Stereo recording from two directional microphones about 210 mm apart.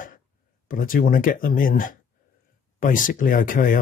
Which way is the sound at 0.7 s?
40° left (ahead or behind).